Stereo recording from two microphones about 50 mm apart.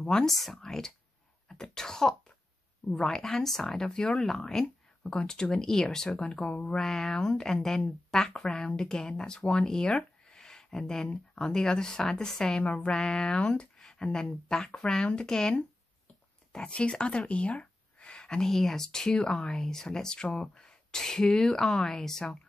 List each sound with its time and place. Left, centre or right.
0.0 s speech: centre
0.3 s speech: centre
6.0 s speech: left